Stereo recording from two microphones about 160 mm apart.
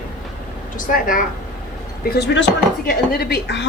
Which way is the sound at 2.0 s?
90° left.